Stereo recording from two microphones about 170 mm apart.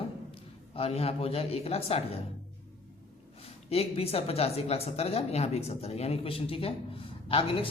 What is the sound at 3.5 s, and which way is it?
Speech, 35° left (ahead or behind).